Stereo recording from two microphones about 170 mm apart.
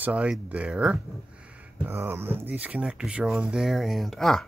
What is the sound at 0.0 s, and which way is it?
Speech, 5° right (ahead or behind).